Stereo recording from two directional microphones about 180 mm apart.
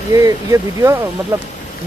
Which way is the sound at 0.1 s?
15° right (ahead or behind).